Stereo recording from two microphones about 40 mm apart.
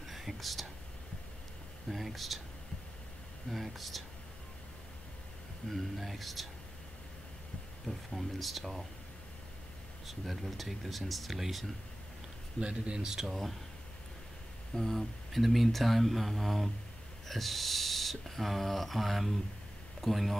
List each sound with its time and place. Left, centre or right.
0.0 s whispering: centre
1.9 s speech: centre
3.4 s speech: centre
5.7 s speech: centre
7.8 s speech: centre
10.0 s speech: centre
12.5 s speech: right
13.3 s speech: centre
14.8 s speech: centre